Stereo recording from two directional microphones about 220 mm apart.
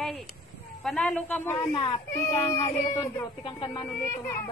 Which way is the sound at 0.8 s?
5° left (ahead or behind).